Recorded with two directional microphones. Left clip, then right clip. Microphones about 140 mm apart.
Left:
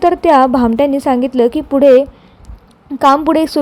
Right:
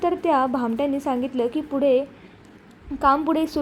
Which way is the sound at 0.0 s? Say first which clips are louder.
Left 11 dB; 45° left (ahead or behind).